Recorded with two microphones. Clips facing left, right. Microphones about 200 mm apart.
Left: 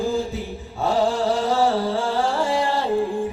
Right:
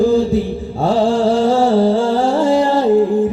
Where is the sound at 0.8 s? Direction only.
30° right (ahead or behind).